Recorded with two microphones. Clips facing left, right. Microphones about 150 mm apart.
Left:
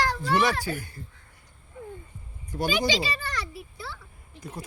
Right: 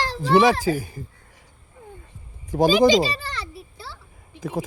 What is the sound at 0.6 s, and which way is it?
Speech, 90° right.